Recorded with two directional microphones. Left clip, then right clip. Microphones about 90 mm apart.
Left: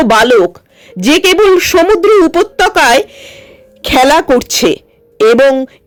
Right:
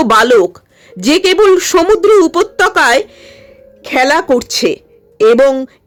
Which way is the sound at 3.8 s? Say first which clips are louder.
Left 4 dB; 60° left (ahead or behind).